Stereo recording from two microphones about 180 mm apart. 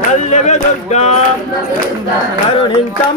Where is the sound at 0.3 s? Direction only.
40° left (ahead or behind).